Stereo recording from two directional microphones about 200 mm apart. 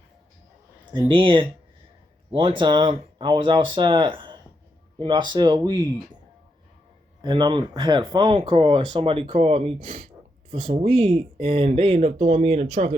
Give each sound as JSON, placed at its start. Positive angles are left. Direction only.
{"t": 0.9, "sound": "speech", "side_deg": -25}
{"t": 7.2, "sound": "speech", "side_deg": -20}
{"t": 9.8, "sound": "speech", "side_deg": -40}
{"t": 10.7, "sound": "speech", "side_deg": -25}